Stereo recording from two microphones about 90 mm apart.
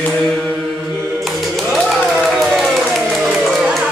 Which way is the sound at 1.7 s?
Centre (ahead or behind).